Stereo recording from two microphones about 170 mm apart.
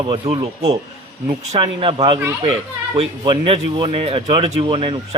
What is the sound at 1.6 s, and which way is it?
A man's voice, 30° right (ahead or behind).